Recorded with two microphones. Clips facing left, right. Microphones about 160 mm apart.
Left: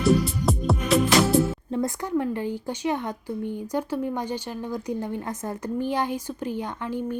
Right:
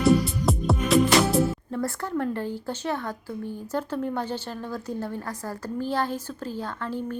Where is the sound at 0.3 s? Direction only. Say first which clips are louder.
Even; centre (ahead or behind).